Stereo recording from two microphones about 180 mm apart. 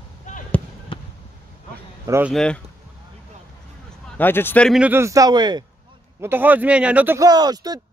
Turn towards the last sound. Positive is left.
turn(degrees=-20)  # may be behind; listen again after turning